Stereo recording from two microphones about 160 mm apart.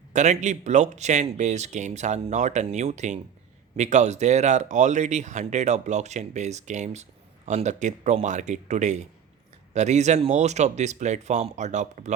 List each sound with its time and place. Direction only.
0.1 s speech: 45° right (ahead or behind)